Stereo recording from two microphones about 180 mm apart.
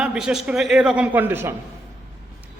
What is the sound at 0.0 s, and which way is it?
A man's voice, 5° right (ahead or behind).